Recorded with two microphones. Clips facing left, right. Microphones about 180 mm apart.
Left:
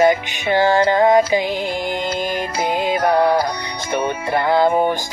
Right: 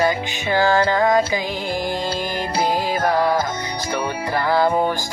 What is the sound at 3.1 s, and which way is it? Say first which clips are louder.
Music: left 4 dB; 25° left (ahead or behind).